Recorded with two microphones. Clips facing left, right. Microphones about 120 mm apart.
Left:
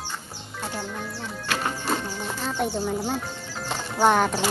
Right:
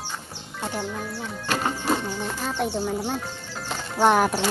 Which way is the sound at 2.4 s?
Centre (ahead or behind).